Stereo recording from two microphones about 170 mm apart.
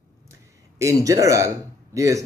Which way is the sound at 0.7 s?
20° right (ahead or behind).